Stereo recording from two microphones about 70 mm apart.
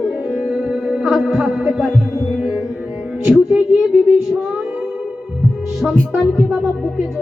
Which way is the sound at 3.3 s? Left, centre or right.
Centre.